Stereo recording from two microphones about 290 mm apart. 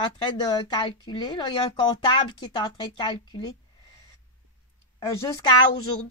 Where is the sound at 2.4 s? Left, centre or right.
Centre.